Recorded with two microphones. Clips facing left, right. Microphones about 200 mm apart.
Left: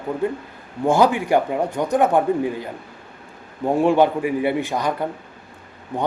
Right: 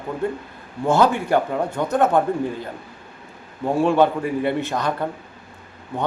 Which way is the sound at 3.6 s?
15° left (ahead or behind).